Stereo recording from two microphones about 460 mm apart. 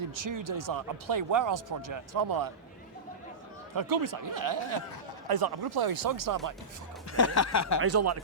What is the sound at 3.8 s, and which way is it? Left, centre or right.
Speech, right.